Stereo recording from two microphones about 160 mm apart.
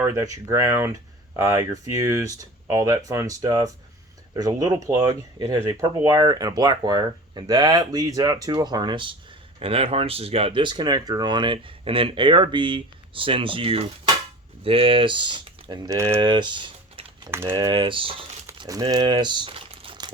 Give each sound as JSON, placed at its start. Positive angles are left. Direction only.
{"t": 0.0, "sound": "speech", "side_deg": -20}
{"t": 18.4, "sound": "speech", "side_deg": -25}